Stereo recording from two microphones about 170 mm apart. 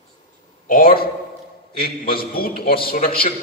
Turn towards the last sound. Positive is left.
turn(degrees=55)  # may be behind; listen again after turning